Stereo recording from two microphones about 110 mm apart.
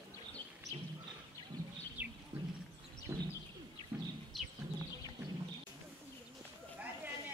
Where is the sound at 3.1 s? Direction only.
25° right (ahead or behind).